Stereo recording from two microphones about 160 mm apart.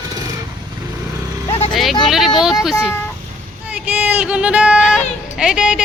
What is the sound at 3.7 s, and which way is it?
Speech, 10° right (ahead or behind).